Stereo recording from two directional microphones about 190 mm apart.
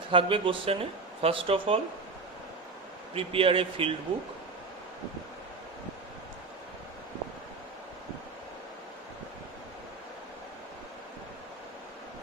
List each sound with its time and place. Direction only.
0.1 s speech: 25° right (ahead or behind)
3.2 s speech: 30° right (ahead or behind)